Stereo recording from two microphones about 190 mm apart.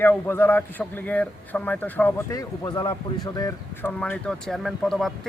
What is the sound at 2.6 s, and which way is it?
A man's voice, 20° left (ahead or behind).